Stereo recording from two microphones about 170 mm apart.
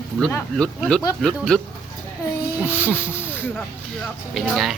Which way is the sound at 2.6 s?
15° left (ahead or behind).